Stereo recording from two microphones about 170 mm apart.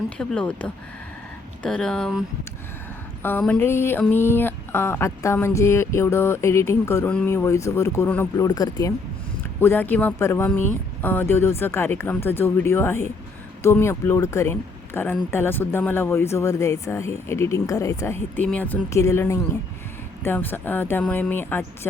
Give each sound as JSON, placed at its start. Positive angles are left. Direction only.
{"t": 0.2, "sound": "speech", "side_deg": 5}
{"t": 3.2, "sound": "speech", "side_deg": 10}
{"t": 8.4, "sound": "speech", "side_deg": 25}
{"t": 9.6, "sound": "speech", "side_deg": 10}